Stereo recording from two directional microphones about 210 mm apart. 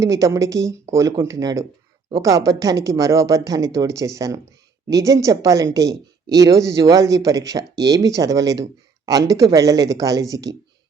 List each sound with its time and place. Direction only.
0.0 s a woman's voice: 15° right (ahead or behind)
8.6 s a sound: 15° right (ahead or behind)
9.3 s a woman's voice: 15° right (ahead or behind)